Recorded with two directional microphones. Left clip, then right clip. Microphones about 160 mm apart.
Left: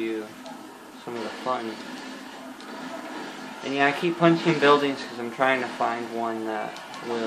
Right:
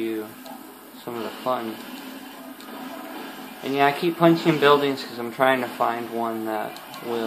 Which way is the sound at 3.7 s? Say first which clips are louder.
Right 2 dB; 55° right (ahead or behind).